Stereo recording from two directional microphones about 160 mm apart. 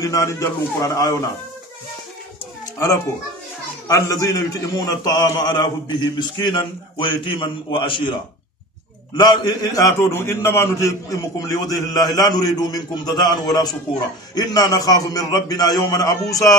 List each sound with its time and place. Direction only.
0.0 s a man's voice: 20° left (ahead or behind)
2.6 s a sound: 20° left (ahead or behind)
3.8 s a man's voice: 20° left (ahead or behind)